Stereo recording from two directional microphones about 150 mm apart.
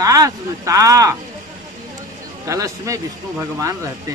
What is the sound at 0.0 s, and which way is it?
Speech, 20° right (ahead or behind).